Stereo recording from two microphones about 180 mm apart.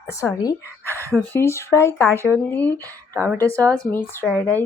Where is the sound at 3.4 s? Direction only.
10° left (ahead or behind).